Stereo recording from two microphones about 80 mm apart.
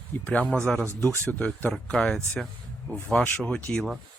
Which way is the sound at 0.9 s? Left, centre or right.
Left.